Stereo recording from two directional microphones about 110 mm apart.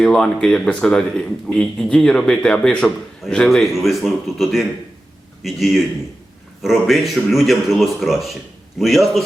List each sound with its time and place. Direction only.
0.0 s a man's voice: 5° left (ahead or behind)